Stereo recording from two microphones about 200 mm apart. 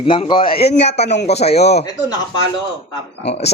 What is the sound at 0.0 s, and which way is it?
A man's voice, 25° left (ahead or behind).